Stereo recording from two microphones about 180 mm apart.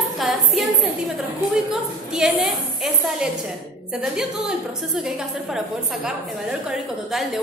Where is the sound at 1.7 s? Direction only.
5° right (ahead or behind).